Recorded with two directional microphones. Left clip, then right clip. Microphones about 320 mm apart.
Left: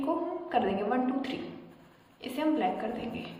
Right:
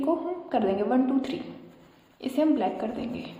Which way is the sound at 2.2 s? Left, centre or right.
Centre.